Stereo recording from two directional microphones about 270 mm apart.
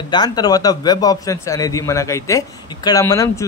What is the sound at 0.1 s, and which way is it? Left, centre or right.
A man's voice, centre.